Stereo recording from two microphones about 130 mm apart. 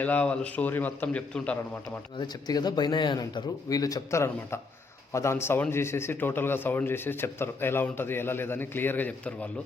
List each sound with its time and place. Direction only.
0.0 s a man's voice: 10° left (ahead or behind)
2.1 s a man's voice: 35° left (ahead or behind); by 9.5 s 10° left (ahead or behind)